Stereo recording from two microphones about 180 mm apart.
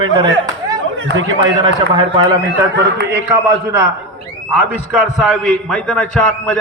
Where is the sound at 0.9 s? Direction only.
90° right.